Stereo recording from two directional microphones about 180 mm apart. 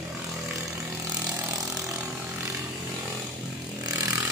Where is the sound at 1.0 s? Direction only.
20° right (ahead or behind).